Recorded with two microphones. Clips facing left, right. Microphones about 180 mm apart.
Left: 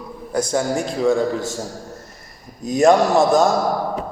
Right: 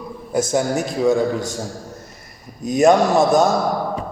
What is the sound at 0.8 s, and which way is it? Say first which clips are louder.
Speech: even; 20° right (ahead or behind).